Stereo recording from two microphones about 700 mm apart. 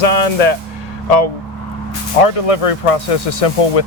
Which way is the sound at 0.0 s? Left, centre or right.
Left.